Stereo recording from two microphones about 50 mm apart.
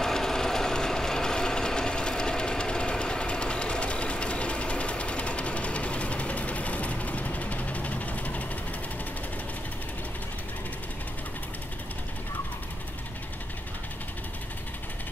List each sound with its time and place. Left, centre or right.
0.0 s vehicle: centre; by 8.5 s left